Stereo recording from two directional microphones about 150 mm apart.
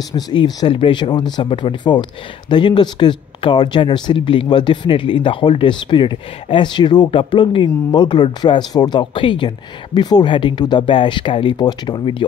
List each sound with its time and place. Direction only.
0.1 s speech: 30° left (ahead or behind)